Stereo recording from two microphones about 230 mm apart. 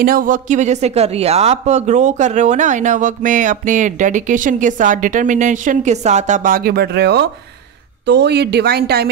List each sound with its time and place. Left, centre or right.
0.0 s speech: right